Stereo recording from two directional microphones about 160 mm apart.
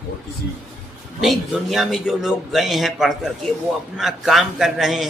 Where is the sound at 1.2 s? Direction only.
Centre (ahead or behind).